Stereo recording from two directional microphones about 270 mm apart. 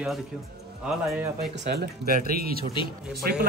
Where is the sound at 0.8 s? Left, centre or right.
Centre.